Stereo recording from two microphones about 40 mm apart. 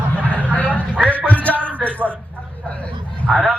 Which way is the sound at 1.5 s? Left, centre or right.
Right.